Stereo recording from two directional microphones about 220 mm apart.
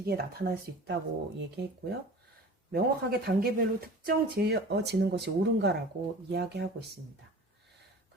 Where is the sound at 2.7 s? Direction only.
45° right (ahead or behind).